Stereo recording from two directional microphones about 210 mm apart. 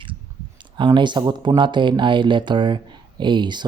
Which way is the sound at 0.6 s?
20° right (ahead or behind).